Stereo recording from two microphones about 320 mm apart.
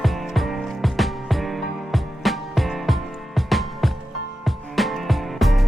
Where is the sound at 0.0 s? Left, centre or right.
Centre.